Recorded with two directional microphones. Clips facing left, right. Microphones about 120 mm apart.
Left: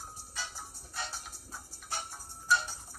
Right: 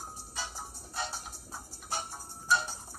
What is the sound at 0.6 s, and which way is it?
Music, 20° right (ahead or behind).